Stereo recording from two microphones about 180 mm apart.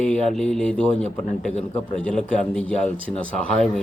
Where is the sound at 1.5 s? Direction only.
35° left (ahead or behind).